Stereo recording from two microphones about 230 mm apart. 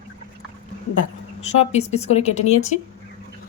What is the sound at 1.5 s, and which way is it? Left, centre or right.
Speech, left.